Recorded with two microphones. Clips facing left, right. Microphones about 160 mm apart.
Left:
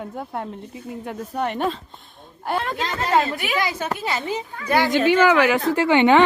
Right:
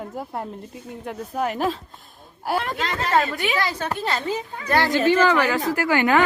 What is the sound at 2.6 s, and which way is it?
A woman's voice, 15° left (ahead or behind).